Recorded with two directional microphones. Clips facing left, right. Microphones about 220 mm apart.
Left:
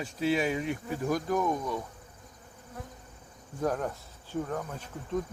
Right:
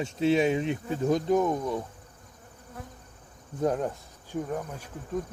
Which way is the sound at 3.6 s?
20° right (ahead or behind).